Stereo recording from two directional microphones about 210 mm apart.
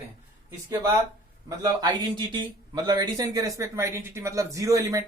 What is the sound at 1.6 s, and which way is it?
Speech, 20° right (ahead or behind).